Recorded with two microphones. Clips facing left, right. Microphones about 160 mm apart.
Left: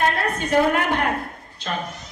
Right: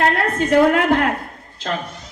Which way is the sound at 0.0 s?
90° right.